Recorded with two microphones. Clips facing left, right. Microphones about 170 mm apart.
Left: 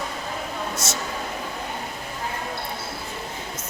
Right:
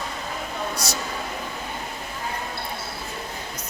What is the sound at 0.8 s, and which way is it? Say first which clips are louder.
Speech: even; 25° left (ahead or behind).